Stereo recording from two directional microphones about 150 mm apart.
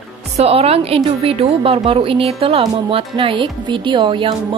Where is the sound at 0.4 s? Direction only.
40° right (ahead or behind).